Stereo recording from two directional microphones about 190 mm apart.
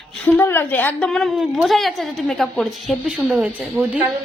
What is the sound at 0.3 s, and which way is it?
A woman's voice, 10° left (ahead or behind).